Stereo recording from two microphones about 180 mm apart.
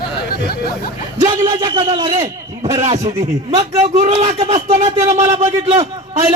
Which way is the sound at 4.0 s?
40° right (ahead or behind).